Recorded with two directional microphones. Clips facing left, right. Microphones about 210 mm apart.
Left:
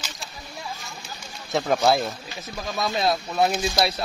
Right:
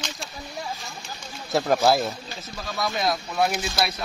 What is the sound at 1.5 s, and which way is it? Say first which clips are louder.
Speech: right 1 dB; centre (ahead or behind).